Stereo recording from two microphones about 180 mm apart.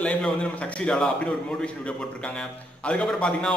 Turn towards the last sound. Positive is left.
turn(degrees=5)  # may be behind; listen again after turning